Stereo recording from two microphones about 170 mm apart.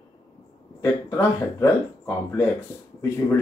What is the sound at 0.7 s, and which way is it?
Speech, 20° left (ahead or behind).